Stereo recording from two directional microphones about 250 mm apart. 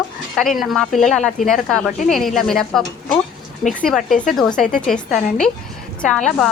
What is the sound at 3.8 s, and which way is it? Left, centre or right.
Speech, centre.